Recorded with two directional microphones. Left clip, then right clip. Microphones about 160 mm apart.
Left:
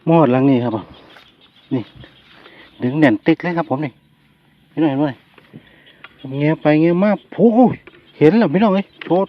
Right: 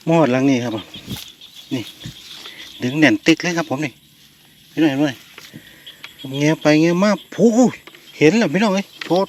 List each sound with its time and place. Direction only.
0.0 s speech: 20° left (ahead or behind)
2.7 s speech: 10° left (ahead or behind)
6.2 s speech: centre (ahead or behind)